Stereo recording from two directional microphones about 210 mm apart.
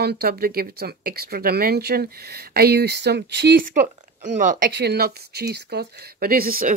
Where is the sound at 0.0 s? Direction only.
45° right (ahead or behind).